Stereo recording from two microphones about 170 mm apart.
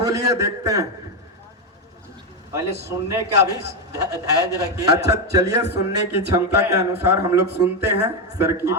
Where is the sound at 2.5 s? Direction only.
15° right (ahead or behind).